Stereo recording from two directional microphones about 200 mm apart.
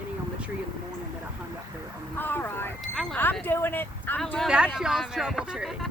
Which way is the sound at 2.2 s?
10° left (ahead or behind).